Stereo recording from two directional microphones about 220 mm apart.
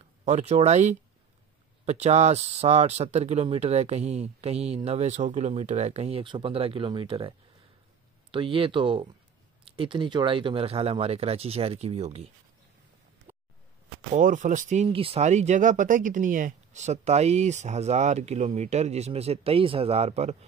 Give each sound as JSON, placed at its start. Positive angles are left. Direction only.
{"t": 0.2, "sound": "speech", "side_deg": -30}
{"t": 13.3, "sound": "a sound", "side_deg": -10}
{"t": 14.1, "sound": "speech", "side_deg": -35}